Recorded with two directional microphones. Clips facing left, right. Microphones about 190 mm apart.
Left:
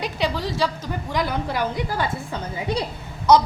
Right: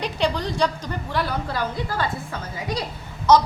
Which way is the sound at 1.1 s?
15° left (ahead or behind).